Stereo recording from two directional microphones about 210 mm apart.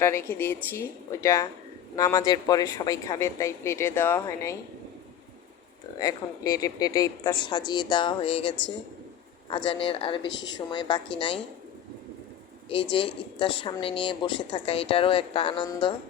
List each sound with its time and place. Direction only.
0.0 s speech: 10° left (ahead or behind)
6.0 s a woman's voice: 20° left (ahead or behind)
10.2 s a woman's voice: 60° left (ahead or behind)
10.5 s a woman's voice: 20° left (ahead or behind)
12.9 s a woman's voice: 25° left (ahead or behind)